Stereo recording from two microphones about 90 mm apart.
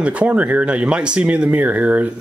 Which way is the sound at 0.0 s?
15° right (ahead or behind).